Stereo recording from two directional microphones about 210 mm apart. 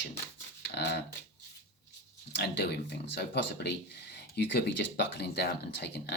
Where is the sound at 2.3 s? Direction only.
55° left (ahead or behind).